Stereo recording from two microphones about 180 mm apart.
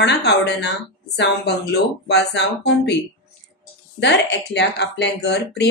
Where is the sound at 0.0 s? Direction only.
70° left (ahead or behind).